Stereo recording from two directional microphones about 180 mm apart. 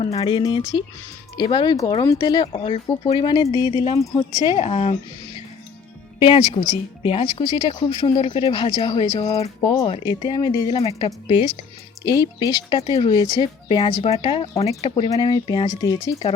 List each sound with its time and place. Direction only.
0.0 s speech: 35° left (ahead or behind)
6.1 s speech: 30° left (ahead or behind)